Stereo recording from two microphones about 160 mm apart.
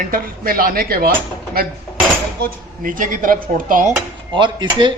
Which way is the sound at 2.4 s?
55° right (ahead or behind).